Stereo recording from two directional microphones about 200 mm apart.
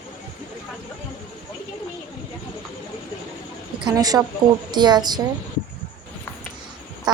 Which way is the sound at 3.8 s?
20° right (ahead or behind).